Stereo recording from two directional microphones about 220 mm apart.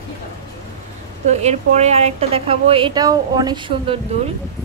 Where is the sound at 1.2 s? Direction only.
30° right (ahead or behind).